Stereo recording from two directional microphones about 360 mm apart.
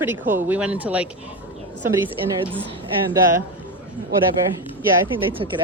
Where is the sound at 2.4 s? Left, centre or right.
Centre.